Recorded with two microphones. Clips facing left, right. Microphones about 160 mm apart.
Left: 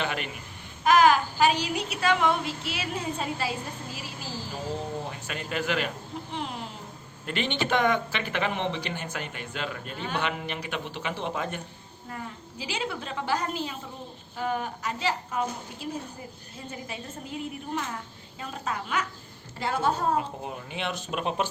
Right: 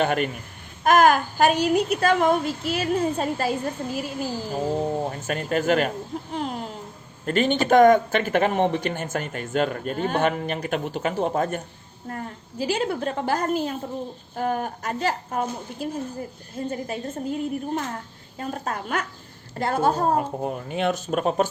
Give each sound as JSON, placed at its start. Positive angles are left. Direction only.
{"t": 0.0, "sound": "speech", "side_deg": -45}